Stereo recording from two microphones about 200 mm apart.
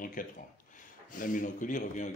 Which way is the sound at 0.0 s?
45° left (ahead or behind).